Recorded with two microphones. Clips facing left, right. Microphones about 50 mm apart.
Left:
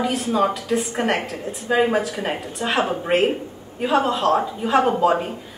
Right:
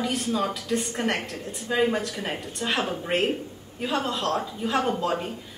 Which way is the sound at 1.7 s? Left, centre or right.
Centre.